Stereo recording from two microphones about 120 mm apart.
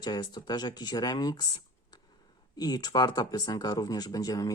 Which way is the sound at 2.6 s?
35° left (ahead or behind).